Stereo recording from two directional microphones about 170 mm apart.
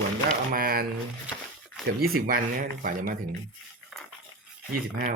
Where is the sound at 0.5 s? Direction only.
60° right (ahead or behind).